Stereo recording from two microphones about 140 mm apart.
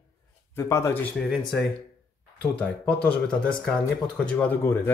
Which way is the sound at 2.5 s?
10° left (ahead or behind).